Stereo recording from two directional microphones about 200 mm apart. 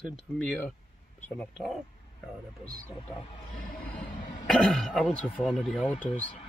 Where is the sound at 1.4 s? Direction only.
Centre (ahead or behind).